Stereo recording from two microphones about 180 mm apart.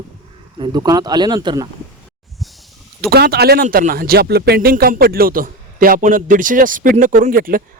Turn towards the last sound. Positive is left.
turn(degrees=-50)  # may be behind; listen again after turning